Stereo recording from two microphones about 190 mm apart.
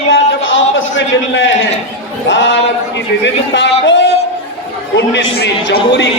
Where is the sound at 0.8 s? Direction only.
80° left.